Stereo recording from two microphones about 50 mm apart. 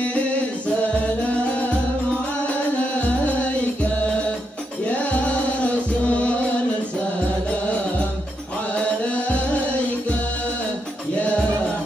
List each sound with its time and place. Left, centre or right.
0.0 s music: left
3.0 s music: left
4.8 s music: left
8.8 s music: left